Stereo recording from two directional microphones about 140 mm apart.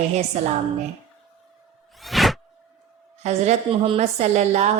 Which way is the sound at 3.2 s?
50° right (ahead or behind).